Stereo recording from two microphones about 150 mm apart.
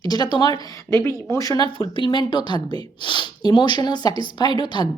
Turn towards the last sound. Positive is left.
turn(degrees=30)  # may be behind; listen again after turning